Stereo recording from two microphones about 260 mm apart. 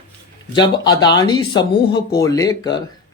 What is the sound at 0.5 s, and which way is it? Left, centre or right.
Speech, centre.